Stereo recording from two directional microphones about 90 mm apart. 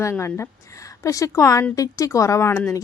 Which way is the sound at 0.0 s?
30° left (ahead or behind).